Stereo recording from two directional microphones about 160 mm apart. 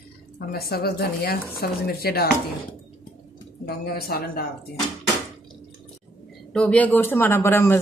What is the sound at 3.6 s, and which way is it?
Speech, 75° left (ahead or behind).